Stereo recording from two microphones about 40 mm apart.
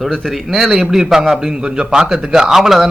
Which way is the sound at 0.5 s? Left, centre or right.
Centre.